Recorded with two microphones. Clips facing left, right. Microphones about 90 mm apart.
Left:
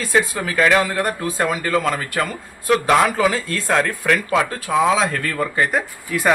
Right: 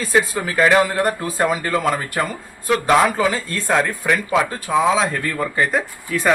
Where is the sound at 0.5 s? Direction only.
15° right (ahead or behind).